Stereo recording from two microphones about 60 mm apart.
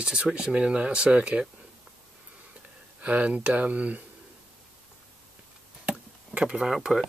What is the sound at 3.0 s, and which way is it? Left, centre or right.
Speech, right.